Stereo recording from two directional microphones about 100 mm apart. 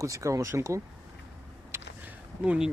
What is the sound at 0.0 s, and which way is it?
Speech, 30° right (ahead or behind).